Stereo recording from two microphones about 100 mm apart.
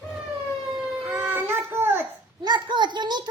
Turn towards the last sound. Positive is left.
turn(degrees=-45)  # may be behind; listen again after turning